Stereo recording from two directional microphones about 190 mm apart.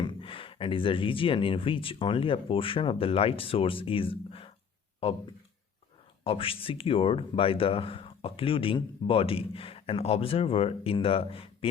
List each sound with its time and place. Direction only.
0.0 s speech: 25° left (ahead or behind)
6.2 s speech: 30° left (ahead or behind)